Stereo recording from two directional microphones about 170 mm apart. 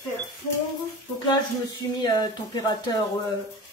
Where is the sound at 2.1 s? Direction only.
25° left (ahead or behind).